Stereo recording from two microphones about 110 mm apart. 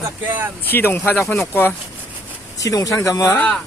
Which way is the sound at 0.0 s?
15° right (ahead or behind).